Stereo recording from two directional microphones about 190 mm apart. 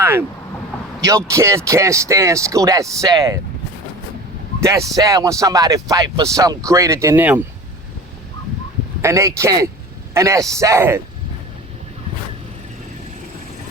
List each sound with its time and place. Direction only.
0.0 s speech: 10° right (ahead or behind)
4.6 s speech: 15° right (ahead or behind)
9.0 s speech: 15° right (ahead or behind)